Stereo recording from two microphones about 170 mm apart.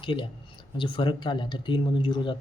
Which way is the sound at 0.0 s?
30° left (ahead or behind).